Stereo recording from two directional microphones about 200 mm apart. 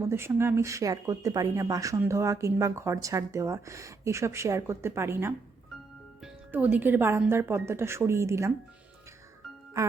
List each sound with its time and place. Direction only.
0.1 s speech: 10° right (ahead or behind)
6.5 s speech: 10° right (ahead or behind)